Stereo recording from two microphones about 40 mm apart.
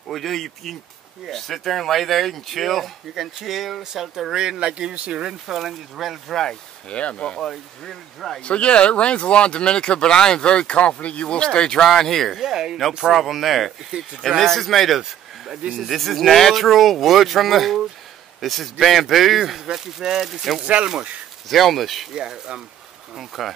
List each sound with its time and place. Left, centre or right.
0.1 s speech: centre; by 5.3 s right
5.5 s speech: centre
6.9 s speech: left
7.3 s speech: centre
8.4 s speech: left
11.8 s speech: centre
12.3 s speech: centre
15.0 s a sound: centre
15.7 s speech: centre
19.6 s speech: centre
20.6 s speech: right
21.5 s speech: centre
22.1 s speech: centre
23.1 s speech: centre